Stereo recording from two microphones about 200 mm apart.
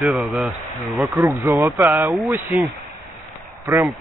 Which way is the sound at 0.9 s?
15° right (ahead or behind).